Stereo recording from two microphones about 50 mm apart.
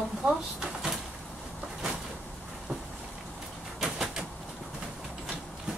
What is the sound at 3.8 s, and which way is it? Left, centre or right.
Bird, centre.